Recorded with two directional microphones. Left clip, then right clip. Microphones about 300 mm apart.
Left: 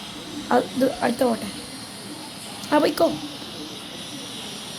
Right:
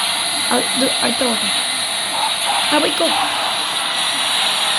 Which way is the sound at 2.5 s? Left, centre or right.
Right.